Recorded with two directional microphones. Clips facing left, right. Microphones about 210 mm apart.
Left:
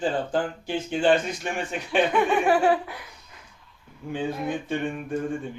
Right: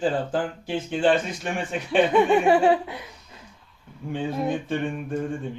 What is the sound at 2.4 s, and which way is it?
Speech, 25° right (ahead or behind).